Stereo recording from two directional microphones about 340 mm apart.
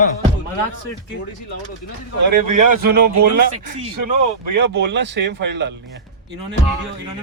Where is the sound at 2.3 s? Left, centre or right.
Right.